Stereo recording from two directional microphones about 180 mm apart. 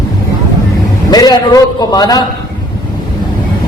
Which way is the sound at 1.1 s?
20° left (ahead or behind).